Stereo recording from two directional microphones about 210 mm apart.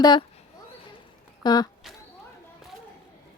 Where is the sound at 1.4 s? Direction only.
20° left (ahead or behind).